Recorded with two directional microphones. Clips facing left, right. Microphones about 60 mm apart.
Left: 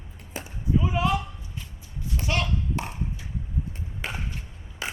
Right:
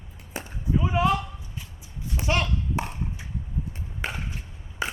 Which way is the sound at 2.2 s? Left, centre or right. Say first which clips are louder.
Right 2 dB; right.